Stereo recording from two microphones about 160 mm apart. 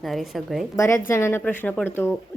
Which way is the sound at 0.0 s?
Centre (ahead or behind).